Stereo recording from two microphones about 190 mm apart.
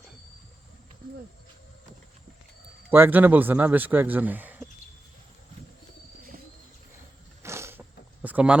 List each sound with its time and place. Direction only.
2.9 s speech: 10° right (ahead or behind)
6.3 s bird: 45° right (ahead or behind)
7.4 s a sound: 15° right (ahead or behind)